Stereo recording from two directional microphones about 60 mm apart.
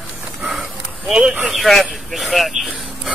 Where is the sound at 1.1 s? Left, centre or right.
Centre.